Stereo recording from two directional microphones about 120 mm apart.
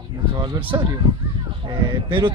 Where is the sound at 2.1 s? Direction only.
40° right (ahead or behind).